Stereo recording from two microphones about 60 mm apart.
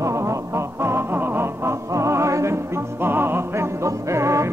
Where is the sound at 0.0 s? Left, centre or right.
Right.